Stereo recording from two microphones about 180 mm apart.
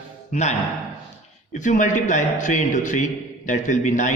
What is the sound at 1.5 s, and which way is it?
A man's voice, 45° left (ahead or behind).